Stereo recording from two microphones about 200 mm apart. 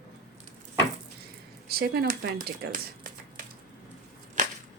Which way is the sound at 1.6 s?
55° right (ahead or behind).